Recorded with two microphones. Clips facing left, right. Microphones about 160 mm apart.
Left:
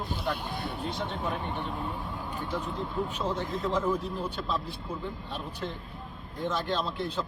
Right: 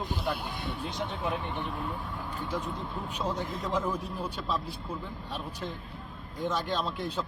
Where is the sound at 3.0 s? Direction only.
10° right (ahead or behind).